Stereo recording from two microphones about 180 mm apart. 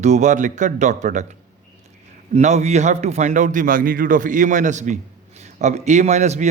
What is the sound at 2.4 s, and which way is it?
A man's voice, 40° right (ahead or behind).